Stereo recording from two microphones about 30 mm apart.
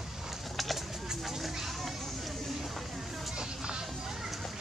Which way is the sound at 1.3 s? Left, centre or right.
Centre.